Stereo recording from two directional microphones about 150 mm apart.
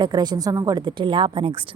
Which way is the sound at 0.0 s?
30° right (ahead or behind).